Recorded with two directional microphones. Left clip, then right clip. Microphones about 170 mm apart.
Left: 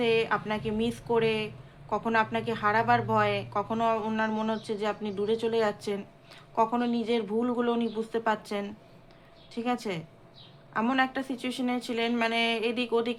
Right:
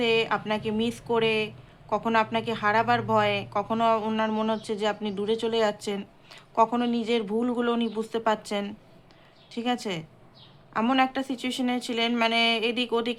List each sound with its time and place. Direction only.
0.0 s a woman's voice: 15° right (ahead or behind)